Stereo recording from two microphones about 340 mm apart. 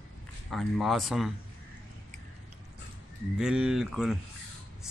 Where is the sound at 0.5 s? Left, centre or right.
Centre.